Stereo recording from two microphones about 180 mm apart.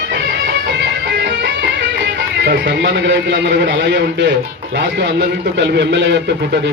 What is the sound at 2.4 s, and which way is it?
A man's voice, 70° right (ahead or behind).